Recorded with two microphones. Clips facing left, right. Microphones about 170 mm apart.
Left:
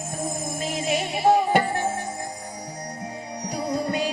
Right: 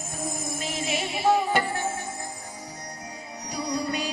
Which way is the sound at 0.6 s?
50° left (ahead or behind).